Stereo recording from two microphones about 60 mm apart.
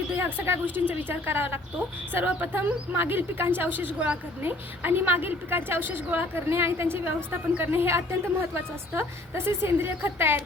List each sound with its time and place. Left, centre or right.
0.3 s a woman's voice: right